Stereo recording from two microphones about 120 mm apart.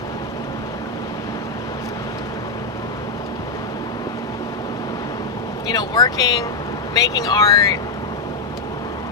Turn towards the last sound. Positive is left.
turn(degrees=30)  # may be behind; listen again after turning